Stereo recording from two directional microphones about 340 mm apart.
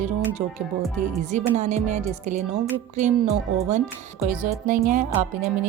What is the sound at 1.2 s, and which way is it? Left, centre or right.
Speech, right.